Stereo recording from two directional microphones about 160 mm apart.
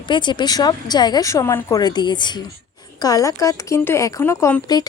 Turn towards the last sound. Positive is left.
turn(degrees=20)  # may be behind; listen again after turning